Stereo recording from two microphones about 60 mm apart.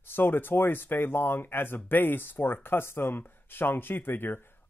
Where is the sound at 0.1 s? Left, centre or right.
Left.